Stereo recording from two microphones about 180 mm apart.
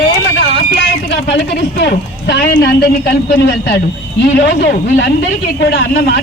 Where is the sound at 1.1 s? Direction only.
85° left.